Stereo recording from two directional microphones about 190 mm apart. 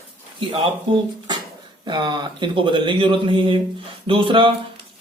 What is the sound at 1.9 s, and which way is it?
A man's voice, 20° right (ahead or behind).